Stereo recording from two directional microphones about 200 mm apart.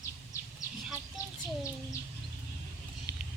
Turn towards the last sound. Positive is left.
turn(degrees=15)  # may be behind; listen again after turning